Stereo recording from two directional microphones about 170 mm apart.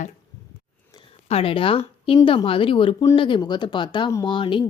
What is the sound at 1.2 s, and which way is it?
Speech, 35° left (ahead or behind).